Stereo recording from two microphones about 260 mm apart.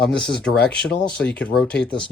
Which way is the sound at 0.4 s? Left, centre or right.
Centre.